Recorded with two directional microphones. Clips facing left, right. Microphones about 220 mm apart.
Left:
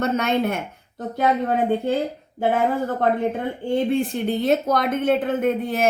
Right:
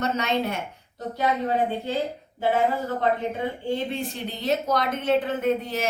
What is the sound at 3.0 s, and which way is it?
Speech, 55° left (ahead or behind).